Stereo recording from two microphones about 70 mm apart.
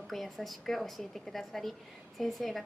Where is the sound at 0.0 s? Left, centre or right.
Centre.